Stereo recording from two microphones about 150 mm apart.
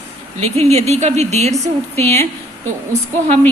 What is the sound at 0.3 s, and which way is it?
A woman's voice, 45° right (ahead or behind).